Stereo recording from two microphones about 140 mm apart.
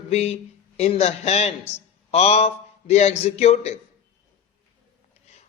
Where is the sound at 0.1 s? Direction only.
50° left (ahead or behind).